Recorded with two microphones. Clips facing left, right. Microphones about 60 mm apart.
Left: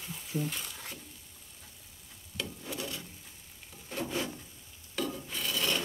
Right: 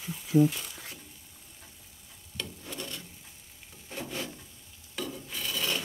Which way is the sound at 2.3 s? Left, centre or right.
Centre.